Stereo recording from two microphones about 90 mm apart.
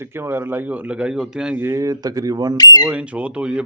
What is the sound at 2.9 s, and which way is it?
Speech, 15° right (ahead or behind).